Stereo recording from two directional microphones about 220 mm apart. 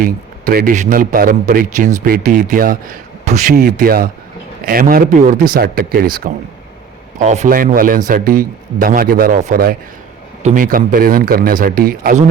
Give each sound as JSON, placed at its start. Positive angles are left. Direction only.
{"t": 0.0, "sound": "speech", "side_deg": -40}
{"t": 3.5, "sound": "speech", "side_deg": -45}